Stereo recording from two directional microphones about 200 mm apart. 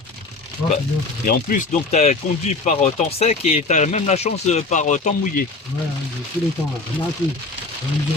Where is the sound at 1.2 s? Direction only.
45° left (ahead or behind).